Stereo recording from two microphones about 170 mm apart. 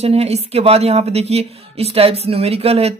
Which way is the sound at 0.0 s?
35° right (ahead or behind).